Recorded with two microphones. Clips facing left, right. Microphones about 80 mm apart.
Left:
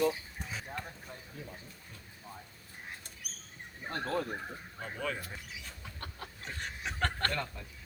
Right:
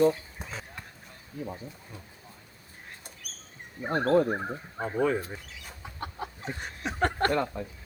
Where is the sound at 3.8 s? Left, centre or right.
Right.